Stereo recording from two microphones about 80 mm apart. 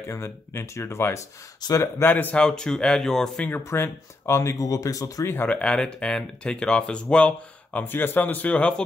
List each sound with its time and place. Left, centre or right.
0.1 s speech: left
2.0 s speech: left
2.3 s speech: centre
3.4 s speech: left
5.3 s speech: left
5.6 s speech: centre